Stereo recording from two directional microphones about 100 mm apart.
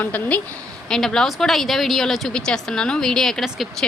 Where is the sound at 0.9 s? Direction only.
5° left (ahead or behind).